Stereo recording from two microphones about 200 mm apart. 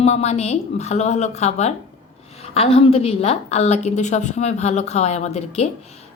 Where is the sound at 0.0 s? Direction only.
35° left (ahead or behind).